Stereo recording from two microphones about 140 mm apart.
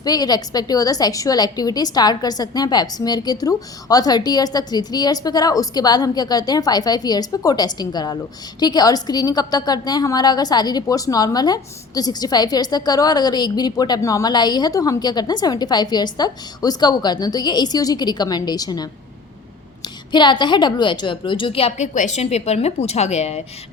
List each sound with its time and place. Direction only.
0.0 s a woman's voice: 30° left (ahead or behind)
20.1 s a woman's voice: 35° left (ahead or behind)
21.8 s a woman's voice: 60° left (ahead or behind)